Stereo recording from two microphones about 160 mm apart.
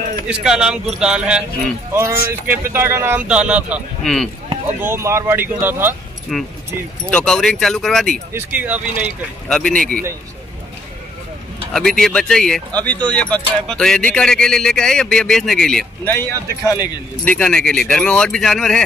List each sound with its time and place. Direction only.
0.3 s speech: 5° right (ahead or behind)
2.4 s speech: 15° right (ahead or behind)
4.0 s speech: 5° left (ahead or behind)
4.8 s speech: 15° right (ahead or behind)
6.3 s speech: centre (ahead or behind)
8.3 s speech: 10° right (ahead or behind)
9.5 s speech: 5° left (ahead or behind)
9.8 s a man's voice: 65° right (ahead or behind)
11.7 s speech: 5° left (ahead or behind)
16.2 s speech: 20° left (ahead or behind)
17.2 s speech: 10° left (ahead or behind)